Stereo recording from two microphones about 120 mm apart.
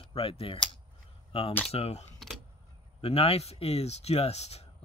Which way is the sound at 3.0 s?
55° left (ahead or behind).